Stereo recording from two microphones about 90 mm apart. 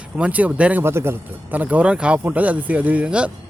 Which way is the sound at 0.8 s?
25° right (ahead or behind).